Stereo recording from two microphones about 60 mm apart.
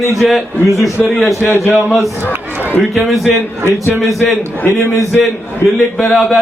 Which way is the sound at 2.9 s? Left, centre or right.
Centre.